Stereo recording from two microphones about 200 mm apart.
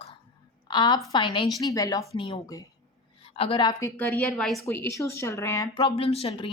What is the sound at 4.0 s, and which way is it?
Speech, centre (ahead or behind).